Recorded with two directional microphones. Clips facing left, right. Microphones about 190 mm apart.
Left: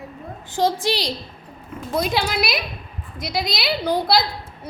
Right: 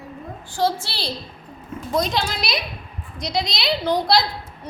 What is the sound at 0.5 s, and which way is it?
A woman's voice, 15° left (ahead or behind).